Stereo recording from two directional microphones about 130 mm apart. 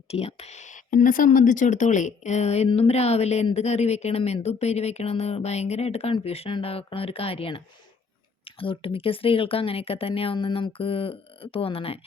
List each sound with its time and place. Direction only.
0.1 s speech: 50° left (ahead or behind)